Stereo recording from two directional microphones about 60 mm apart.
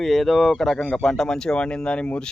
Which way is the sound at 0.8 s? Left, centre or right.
Centre.